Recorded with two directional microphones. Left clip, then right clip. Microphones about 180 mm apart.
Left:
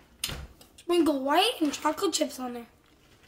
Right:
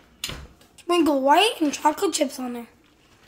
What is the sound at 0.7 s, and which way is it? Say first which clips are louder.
A woman's voice: right 5 dB; 10° right (ahead or behind).